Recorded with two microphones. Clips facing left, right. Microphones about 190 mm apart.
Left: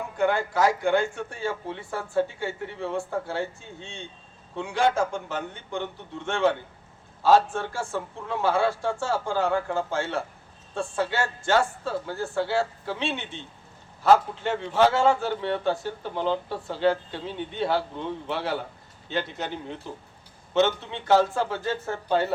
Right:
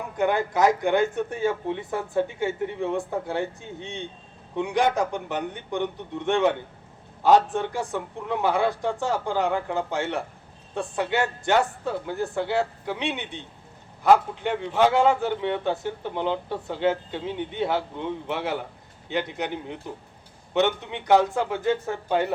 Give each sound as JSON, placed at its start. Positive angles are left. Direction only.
{"t": 0.2, "sound": "a man's voice", "side_deg": -20}